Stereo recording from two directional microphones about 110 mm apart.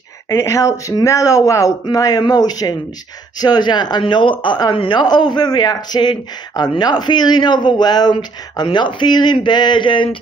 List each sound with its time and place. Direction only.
0.3 s speech: 30° left (ahead or behind); by 10.1 s 45° left (ahead or behind)